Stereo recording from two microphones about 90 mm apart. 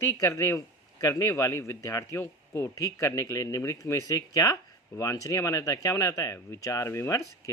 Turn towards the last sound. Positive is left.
turn(degrees=30)  # may be behind; listen again after turning